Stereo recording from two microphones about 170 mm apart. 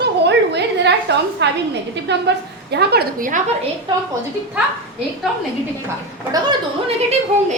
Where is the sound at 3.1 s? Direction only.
50° right (ahead or behind).